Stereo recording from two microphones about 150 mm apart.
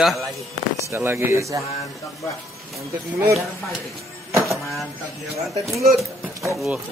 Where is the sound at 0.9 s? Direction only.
15° right (ahead or behind).